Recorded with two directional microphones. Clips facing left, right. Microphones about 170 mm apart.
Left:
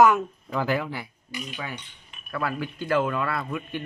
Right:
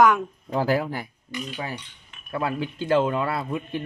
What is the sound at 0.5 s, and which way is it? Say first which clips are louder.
Speech: right 3 dB; 35° right (ahead or behind).